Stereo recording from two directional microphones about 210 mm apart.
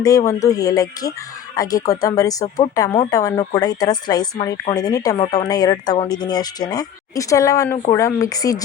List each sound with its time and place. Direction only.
0.0 s speech: 15° left (ahead or behind)